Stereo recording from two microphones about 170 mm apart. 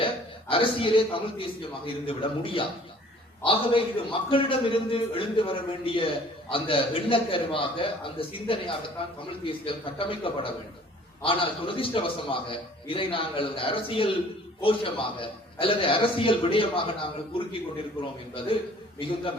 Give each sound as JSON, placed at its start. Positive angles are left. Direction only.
{"t": 0.0, "sound": "a man's voice", "side_deg": 30}
{"t": 18.9, "sound": "a man's voice", "side_deg": 30}